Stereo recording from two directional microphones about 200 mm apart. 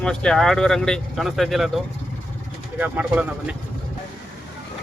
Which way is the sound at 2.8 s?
5° right (ahead or behind).